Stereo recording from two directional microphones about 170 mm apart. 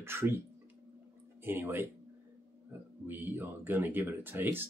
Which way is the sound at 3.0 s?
10° right (ahead or behind).